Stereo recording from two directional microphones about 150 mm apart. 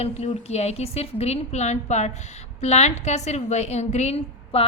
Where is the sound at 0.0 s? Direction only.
45° left (ahead or behind).